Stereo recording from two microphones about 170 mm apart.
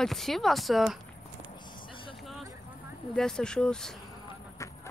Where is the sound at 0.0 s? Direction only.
Centre (ahead or behind).